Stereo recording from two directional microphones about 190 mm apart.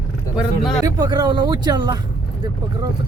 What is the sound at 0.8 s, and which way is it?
Speech, 20° right (ahead or behind).